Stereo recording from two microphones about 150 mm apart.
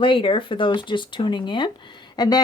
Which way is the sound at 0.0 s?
35° left (ahead or behind).